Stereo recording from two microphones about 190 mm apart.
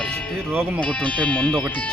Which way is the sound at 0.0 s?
5° left (ahead or behind).